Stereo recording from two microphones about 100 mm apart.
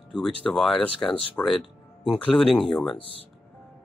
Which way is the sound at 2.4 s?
Centre (ahead or behind).